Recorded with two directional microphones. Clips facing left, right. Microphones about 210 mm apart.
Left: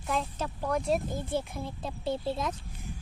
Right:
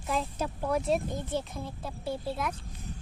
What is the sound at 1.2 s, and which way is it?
Speech, 10° left (ahead or behind).